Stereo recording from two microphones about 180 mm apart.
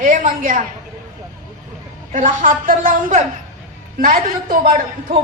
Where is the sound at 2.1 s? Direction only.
45° right (ahead or behind).